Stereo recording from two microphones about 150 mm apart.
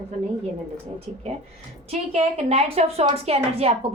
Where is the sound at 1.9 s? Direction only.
40° right (ahead or behind).